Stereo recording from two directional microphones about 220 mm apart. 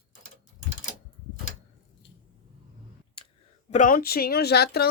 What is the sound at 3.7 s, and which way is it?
Speech, 35° left (ahead or behind).